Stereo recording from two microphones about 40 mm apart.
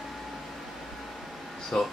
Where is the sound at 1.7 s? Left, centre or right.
Centre.